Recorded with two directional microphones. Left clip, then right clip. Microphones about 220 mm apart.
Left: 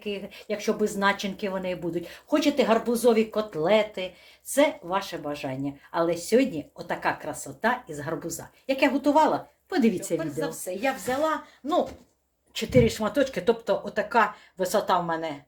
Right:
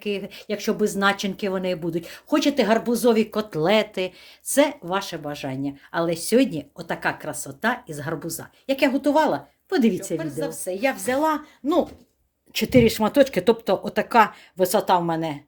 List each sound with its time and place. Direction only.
0.0 s speech: 35° right (ahead or behind)
11.1 s speech: 50° right (ahead or behind)